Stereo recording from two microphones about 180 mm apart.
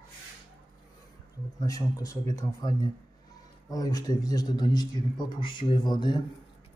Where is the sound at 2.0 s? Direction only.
20° left (ahead or behind).